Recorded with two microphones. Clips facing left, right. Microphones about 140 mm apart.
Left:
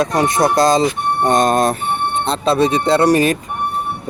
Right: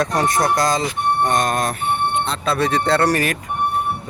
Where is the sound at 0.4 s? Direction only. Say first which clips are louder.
Left 6 dB; 25° left (ahead or behind).